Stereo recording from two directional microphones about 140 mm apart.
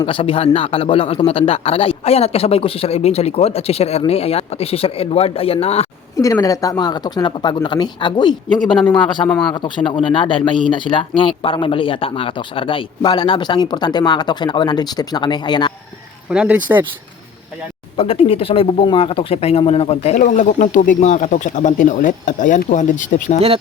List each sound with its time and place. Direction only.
0.0 s a man's voice: 40° left (ahead or behind)
6.1 s speech: 25° left (ahead or behind)
16.3 s speech: 10° right (ahead or behind)
17.9 s speech: 40° left (ahead or behind)
20.1 s speech: 65° left (ahead or behind)